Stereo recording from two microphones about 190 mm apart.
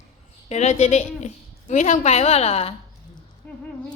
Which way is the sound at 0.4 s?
35° left (ahead or behind).